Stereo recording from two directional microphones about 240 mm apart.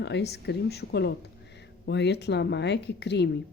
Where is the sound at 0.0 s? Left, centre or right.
Left.